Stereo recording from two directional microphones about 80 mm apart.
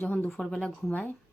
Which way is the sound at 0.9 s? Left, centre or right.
Left.